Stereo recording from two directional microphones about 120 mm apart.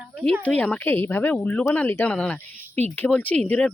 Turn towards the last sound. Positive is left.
turn(degrees=5)  # may be behind; listen again after turning